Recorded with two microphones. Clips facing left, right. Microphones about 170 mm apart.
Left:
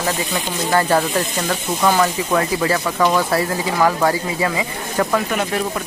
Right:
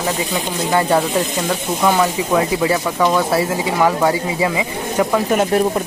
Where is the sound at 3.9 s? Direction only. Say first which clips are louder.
Right 1 dB; centre (ahead or behind).